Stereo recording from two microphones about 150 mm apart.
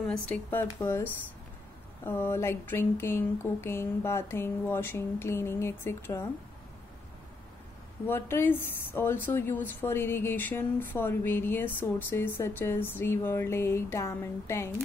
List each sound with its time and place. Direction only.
0.3 s speech: 15° left (ahead or behind)
8.1 s speech: 15° left (ahead or behind)